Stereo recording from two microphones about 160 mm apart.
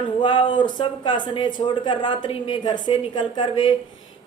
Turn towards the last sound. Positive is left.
turn(degrees=30)  # may be behind; listen again after turning